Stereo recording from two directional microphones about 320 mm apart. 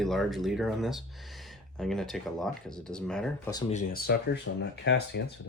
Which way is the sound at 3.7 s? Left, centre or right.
Left.